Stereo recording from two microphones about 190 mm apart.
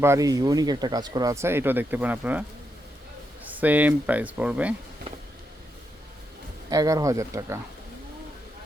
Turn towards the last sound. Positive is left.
turn(degrees=-15)  # may be behind; listen again after turning